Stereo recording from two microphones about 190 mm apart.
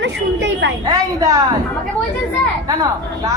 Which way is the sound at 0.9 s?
20° right (ahead or behind).